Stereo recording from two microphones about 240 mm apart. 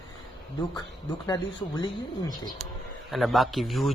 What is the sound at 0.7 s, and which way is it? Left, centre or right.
Speech, centre.